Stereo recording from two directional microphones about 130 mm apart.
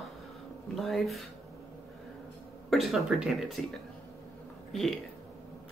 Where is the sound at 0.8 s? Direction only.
Centre (ahead or behind).